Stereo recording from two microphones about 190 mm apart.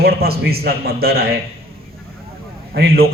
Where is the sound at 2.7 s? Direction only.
55° right (ahead or behind).